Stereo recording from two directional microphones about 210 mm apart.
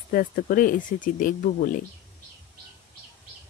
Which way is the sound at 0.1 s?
40° left (ahead or behind).